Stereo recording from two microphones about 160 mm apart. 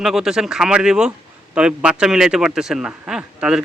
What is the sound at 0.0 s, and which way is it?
Speech, 5° right (ahead or behind).